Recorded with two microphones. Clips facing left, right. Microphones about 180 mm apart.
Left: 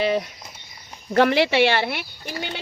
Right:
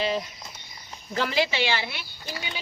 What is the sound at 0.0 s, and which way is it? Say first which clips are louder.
Cricket: left 5 dB; 60° left (ahead or behind).